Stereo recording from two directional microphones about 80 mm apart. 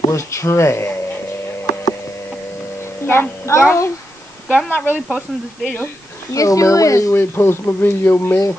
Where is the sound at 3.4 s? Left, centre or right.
Left.